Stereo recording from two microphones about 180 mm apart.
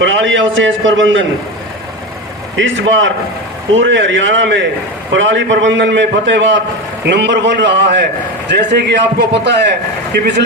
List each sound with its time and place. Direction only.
0.0 s a man's voice: 90° right
2.6 s a man's voice: 90° right
7.1 s speech: 75° right (ahead or behind)